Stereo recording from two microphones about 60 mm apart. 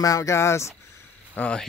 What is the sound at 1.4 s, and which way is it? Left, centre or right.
Speech, left.